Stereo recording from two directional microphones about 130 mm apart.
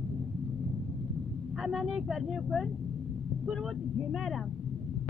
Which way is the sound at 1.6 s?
5° right (ahead or behind).